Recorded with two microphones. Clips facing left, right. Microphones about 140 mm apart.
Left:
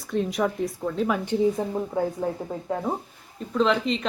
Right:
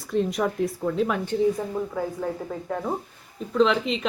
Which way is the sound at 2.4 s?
10° left (ahead or behind).